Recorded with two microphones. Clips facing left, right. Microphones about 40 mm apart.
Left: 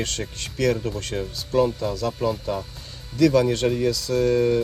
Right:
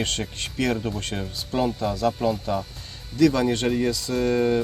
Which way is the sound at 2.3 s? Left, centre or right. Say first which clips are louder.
Right 1 dB; centre.